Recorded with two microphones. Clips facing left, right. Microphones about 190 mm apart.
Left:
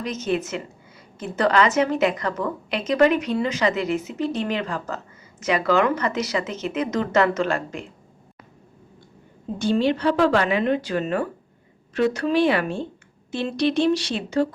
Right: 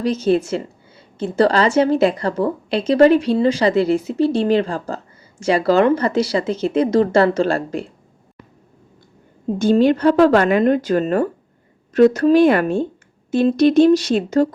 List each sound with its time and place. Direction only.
0.0 s a woman's voice: 30° right (ahead or behind)
9.6 s speech: 45° right (ahead or behind)